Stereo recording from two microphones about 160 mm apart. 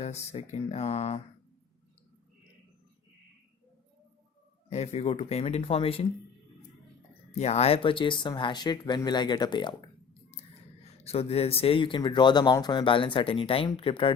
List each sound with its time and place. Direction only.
0.0 s speech: 40° left (ahead or behind)
4.7 s speech: 40° left (ahead or behind)
7.3 s speech: 45° left (ahead or behind)
10.9 s speech: 40° left (ahead or behind)